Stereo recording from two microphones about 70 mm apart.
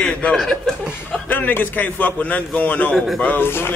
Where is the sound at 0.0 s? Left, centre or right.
Centre.